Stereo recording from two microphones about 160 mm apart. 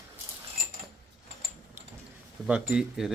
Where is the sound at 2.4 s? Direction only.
5° right (ahead or behind).